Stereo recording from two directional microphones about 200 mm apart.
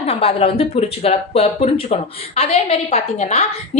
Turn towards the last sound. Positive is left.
turn(degrees=35)  # may be behind; listen again after turning